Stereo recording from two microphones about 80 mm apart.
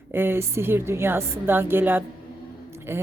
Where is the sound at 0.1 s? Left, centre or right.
Right.